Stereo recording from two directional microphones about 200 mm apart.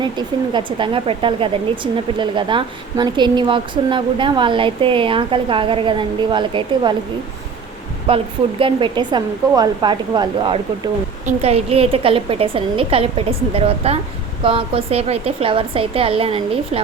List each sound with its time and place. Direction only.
0.0 s speech: 25° right (ahead or behind)
8.0 s speech: 25° right (ahead or behind)